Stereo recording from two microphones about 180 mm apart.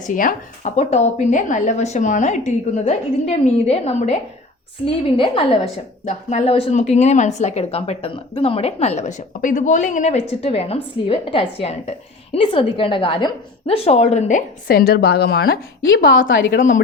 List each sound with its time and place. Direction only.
0.0 s a woman's voice: 45° left (ahead or behind)
16.0 s a woman's voice: 90° left